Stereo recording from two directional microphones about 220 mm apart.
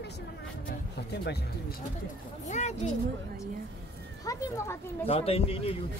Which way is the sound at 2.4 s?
30° left (ahead or behind).